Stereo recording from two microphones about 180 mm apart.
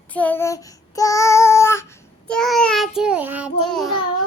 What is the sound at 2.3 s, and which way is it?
Child singing, 5° left (ahead or behind).